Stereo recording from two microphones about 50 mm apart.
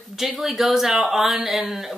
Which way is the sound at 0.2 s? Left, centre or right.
Centre.